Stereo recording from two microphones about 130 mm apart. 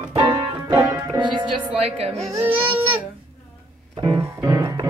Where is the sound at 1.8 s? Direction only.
55° right (ahead or behind).